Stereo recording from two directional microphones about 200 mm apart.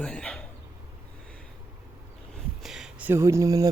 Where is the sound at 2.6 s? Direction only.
5° right (ahead or behind).